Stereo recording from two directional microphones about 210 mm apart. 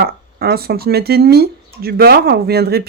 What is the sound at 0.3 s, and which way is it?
Speech, 50° right (ahead or behind).